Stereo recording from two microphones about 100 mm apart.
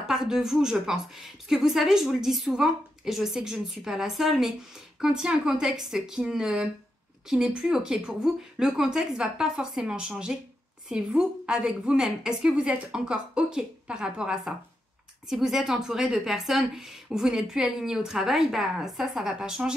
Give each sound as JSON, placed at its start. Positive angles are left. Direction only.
{"t": 0.0, "sound": "a woman's voice", "side_deg": -5}